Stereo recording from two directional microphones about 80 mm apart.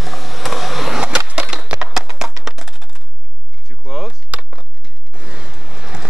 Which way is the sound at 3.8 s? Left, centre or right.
Centre.